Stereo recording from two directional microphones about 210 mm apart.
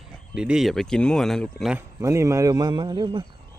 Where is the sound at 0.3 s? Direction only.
5° right (ahead or behind).